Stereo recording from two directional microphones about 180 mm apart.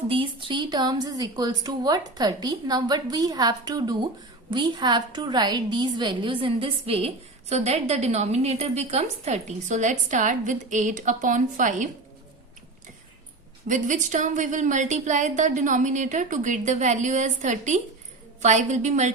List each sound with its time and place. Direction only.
0.1 s a woman's voice: 30° right (ahead or behind); by 11.9 s 45° right (ahead or behind)
13.7 s a woman's voice: 45° right (ahead or behind)